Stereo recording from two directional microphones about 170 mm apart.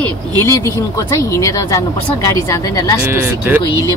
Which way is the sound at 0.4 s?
20° left (ahead or behind).